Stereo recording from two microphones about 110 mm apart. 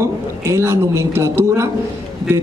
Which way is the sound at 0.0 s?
25° right (ahead or behind).